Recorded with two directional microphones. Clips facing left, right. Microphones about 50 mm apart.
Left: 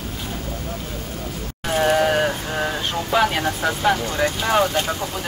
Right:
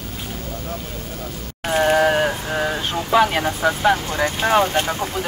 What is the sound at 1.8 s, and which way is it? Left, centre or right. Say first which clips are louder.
Vehicle: right 1 dB; centre.